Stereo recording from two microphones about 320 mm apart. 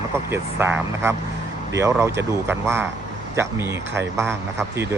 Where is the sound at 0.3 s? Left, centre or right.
Centre.